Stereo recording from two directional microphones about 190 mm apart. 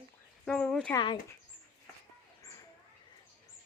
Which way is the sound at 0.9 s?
25° left (ahead or behind).